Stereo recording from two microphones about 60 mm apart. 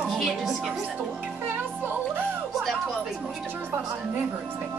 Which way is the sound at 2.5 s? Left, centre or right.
Centre.